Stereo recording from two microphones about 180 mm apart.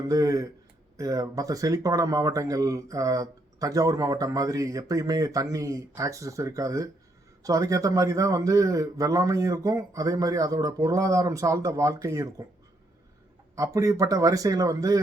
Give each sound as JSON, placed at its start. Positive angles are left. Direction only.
{"t": 0.0, "sound": "speech", "side_deg": -20}
{"t": 13.6, "sound": "speech", "side_deg": -20}